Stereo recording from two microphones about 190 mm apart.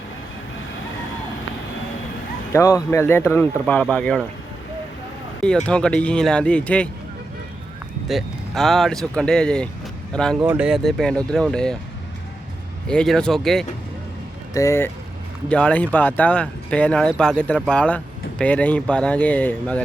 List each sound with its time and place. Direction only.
2.5 s speech: 15° left (ahead or behind)
5.4 s speech: 5° left (ahead or behind)
8.0 s speech: centre (ahead or behind)
10.4 s speech: 5° right (ahead or behind)
12.9 s speech: 5° left (ahead or behind)
14.5 s speech: 15° left (ahead or behind)